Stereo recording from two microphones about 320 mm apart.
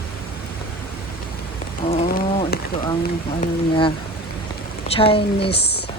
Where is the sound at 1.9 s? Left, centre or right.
Centre.